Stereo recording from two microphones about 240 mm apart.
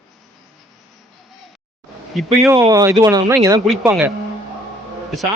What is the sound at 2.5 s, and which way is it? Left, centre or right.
A man's voice, centre.